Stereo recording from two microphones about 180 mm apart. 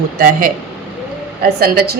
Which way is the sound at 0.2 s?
55° right (ahead or behind).